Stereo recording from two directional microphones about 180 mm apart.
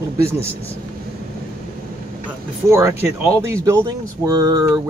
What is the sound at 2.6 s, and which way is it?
Speech, 15° right (ahead or behind).